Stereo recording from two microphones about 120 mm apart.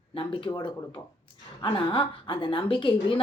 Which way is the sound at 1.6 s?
45° left (ahead or behind).